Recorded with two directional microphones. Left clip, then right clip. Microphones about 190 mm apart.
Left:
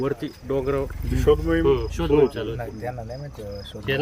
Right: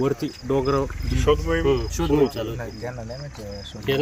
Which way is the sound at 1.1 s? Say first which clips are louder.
Left 2 dB; 65° left (ahead or behind).